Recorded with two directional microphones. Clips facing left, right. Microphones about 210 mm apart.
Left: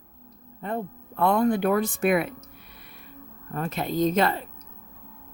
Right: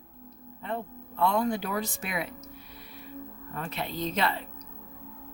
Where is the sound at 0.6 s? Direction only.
50° left (ahead or behind).